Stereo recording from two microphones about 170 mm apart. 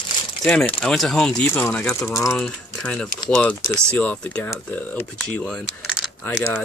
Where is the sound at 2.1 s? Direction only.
20° left (ahead or behind).